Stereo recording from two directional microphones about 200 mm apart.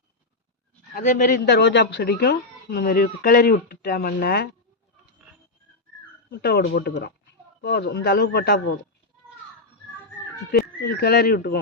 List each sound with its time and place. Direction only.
0.9 s a man's voice: 40° left (ahead or behind)
1.5 s speech: 55° left (ahead or behind)
6.3 s speech: 55° left (ahead or behind)
10.5 s speech: 50° left (ahead or behind)